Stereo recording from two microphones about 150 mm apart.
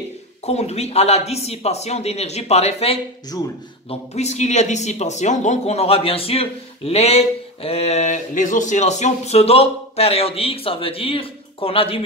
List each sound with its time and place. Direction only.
0.5 s speech: 45° left (ahead or behind)
3.3 s speech: 25° left (ahead or behind)
3.9 s speech: 45° left (ahead or behind)